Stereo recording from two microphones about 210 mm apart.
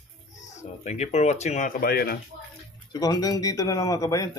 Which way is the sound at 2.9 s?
20° left (ahead or behind).